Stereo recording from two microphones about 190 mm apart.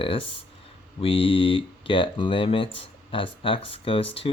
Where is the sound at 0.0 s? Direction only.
30° left (ahead or behind).